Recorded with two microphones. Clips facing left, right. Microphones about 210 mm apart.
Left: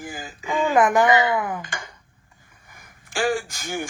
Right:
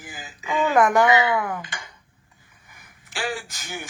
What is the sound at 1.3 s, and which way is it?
Speech, 15° left (ahead or behind).